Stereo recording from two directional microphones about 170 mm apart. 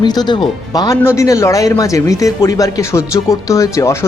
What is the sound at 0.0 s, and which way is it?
Speech, 25° left (ahead or behind).